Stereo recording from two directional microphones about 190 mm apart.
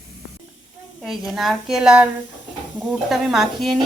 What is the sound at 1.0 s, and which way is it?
Speech, centre (ahead or behind).